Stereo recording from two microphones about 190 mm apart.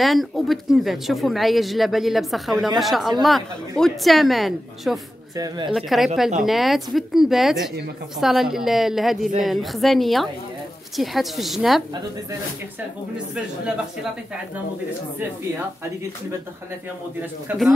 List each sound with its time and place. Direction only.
0.0 s speech: centre (ahead or behind)
5.3 s speech: 20° right (ahead or behind)
5.7 s speech: centre (ahead or behind)
17.5 s speech: 10° right (ahead or behind)